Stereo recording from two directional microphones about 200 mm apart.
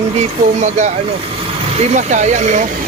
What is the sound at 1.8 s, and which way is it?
Speech, 35° right (ahead or behind).